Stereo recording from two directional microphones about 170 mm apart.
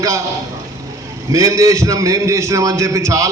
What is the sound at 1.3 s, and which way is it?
A man's voice, 20° right (ahead or behind).